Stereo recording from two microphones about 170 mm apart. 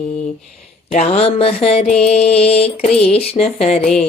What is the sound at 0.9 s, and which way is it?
Music, 40° left (ahead or behind).